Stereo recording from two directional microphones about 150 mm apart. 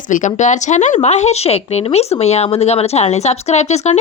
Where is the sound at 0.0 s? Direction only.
55° left (ahead or behind).